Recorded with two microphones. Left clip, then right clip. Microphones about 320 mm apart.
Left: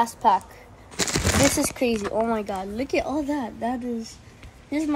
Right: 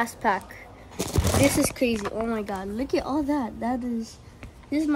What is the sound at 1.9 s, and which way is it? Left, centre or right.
Speech, left.